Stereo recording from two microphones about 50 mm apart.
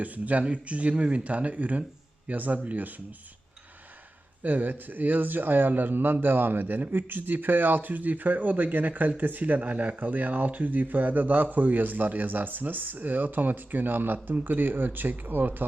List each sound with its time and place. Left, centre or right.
0.0 s speech: right
4.4 s speech: right